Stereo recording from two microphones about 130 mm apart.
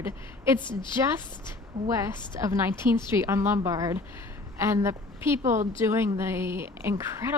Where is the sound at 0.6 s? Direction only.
35° left (ahead or behind).